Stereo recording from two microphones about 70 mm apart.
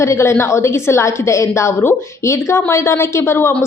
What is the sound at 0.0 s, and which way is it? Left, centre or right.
A woman's voice, left.